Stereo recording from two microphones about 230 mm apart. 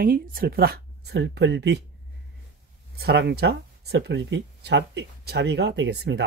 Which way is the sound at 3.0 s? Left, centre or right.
Right.